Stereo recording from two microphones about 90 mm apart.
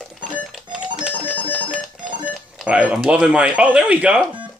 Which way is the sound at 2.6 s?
15° right (ahead or behind).